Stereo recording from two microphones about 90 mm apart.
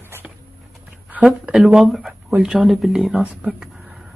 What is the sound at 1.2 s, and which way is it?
Speech, 10° right (ahead or behind).